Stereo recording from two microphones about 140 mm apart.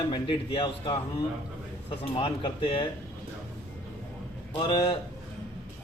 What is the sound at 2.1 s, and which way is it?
Speech, 40° left (ahead or behind).